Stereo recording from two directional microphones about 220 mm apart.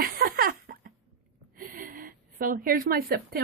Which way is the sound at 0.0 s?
40° right (ahead or behind).